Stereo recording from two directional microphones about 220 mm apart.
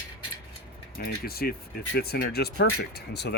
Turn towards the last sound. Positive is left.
turn(degrees=50)  # may be behind; listen again after turning